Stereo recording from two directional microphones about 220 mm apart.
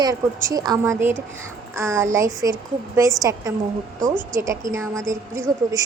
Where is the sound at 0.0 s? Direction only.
15° right (ahead or behind).